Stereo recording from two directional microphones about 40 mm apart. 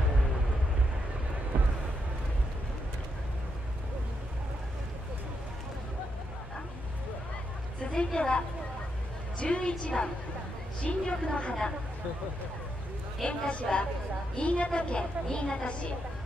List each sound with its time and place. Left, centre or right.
7.9 s a woman's voice: left
13.2 s a woman's voice: centre
13.5 s a woman's voice: left